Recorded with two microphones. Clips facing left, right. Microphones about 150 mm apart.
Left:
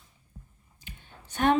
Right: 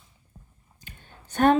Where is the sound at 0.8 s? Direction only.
45° right (ahead or behind).